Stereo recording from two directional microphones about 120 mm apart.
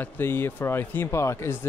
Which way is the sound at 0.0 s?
20° left (ahead or behind).